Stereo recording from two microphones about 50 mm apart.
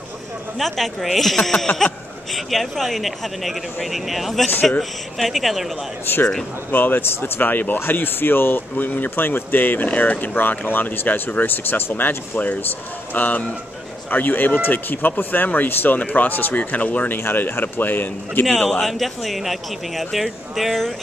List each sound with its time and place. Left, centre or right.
0.6 s speech: centre
6.7 s speech: left
17.2 s speech: left
18.6 s a man's voice: centre
18.9 s speech: centre